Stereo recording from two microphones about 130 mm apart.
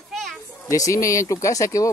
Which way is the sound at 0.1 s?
Centre (ahead or behind).